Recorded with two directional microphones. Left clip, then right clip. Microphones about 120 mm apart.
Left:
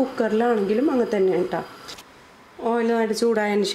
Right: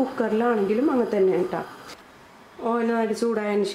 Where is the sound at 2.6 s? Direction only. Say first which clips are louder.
Left 2 dB; 15° left (ahead or behind).